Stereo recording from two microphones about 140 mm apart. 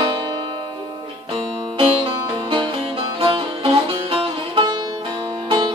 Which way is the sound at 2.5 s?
35° right (ahead or behind).